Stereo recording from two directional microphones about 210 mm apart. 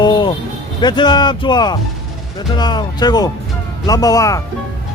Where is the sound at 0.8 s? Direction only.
20° left (ahead or behind).